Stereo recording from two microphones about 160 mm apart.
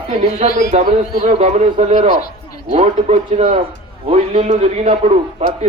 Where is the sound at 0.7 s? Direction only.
40° right (ahead or behind).